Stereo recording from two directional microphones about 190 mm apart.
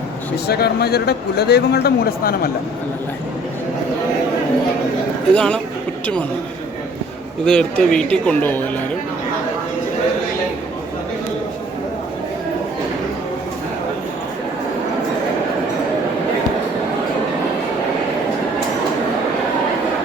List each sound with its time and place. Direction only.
0.4 s speech: 55° left (ahead or behind)
5.3 s speech: 5° left (ahead or behind)
7.4 s speech: 5° left (ahead or behind)